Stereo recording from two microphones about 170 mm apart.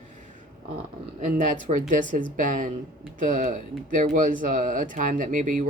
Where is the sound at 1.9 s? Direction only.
50° right (ahead or behind).